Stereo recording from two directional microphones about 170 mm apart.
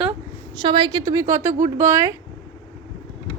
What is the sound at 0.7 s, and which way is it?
A woman's voice, 25° right (ahead or behind).